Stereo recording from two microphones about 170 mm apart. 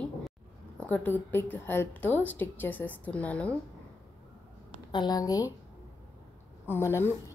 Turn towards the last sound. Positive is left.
turn(degrees=15)  # may be behind; listen again after turning